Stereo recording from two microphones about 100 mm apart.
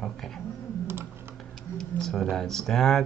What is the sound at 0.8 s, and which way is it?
Typing, 20° right (ahead or behind).